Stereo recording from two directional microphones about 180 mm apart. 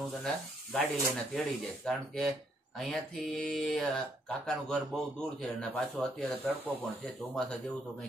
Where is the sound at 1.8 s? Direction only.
5° left (ahead or behind).